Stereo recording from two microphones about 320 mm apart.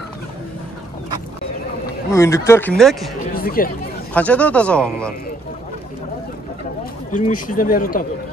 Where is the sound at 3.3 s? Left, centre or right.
Left.